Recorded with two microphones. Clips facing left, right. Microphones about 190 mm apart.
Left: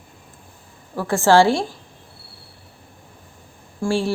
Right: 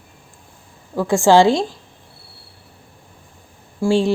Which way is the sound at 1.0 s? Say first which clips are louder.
Right 2 dB; 15° right (ahead or behind).